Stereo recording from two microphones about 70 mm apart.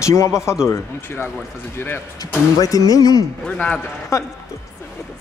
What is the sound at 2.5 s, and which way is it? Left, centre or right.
Speech, left.